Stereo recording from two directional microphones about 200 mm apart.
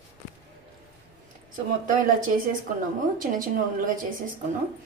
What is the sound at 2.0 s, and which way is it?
A woman's voice, 45° right (ahead or behind).